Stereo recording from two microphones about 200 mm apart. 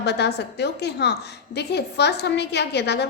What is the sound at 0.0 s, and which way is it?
A woman's voice, 55° left (ahead or behind).